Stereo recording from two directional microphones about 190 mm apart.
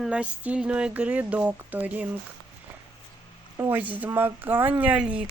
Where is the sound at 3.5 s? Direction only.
10° right (ahead or behind).